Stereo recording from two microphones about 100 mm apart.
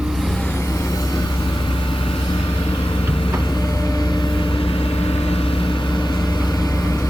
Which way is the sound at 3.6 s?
40° left (ahead or behind).